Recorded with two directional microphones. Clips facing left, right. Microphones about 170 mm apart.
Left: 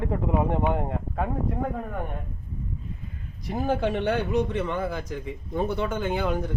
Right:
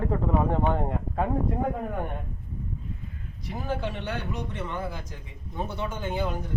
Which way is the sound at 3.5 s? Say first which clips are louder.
Left 6 dB; 55° left (ahead or behind).